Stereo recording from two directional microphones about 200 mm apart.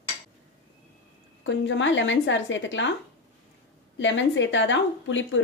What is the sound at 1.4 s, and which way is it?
Speech, 65° left (ahead or behind).